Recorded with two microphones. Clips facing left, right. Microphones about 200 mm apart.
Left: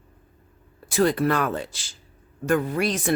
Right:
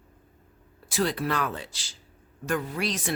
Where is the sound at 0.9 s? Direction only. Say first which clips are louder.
Left 6 dB; 50° left (ahead or behind).